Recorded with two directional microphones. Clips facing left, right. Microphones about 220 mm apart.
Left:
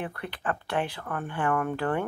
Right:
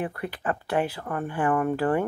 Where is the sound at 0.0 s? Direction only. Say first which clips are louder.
Right 4 dB; 5° right (ahead or behind).